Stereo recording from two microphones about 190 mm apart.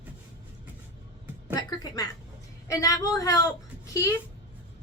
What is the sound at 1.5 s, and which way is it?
Speech, 20° left (ahead or behind).